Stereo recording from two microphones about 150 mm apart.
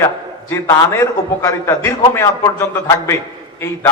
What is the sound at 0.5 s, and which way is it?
A man's voice, 20° left (ahead or behind).